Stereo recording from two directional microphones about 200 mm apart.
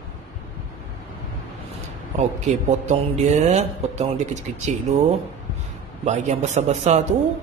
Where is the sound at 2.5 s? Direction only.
35° right (ahead or behind).